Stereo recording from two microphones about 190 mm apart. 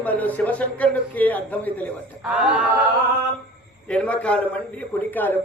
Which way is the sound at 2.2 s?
5° right (ahead or behind).